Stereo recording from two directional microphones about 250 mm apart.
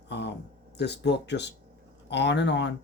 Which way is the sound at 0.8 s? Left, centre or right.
Left.